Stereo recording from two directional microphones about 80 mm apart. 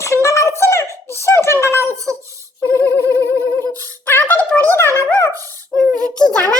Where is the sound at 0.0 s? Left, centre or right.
Left.